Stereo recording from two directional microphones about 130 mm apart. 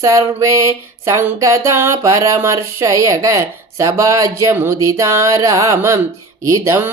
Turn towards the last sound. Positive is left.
turn(degrees=-20)  # may be behind; listen again after turning